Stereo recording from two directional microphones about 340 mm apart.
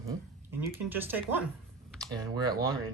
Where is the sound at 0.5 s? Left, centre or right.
Centre.